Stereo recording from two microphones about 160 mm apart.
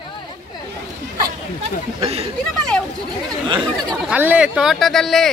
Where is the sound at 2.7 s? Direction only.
5° left (ahead or behind).